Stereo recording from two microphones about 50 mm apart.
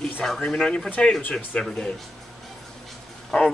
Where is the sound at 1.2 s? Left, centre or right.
Left.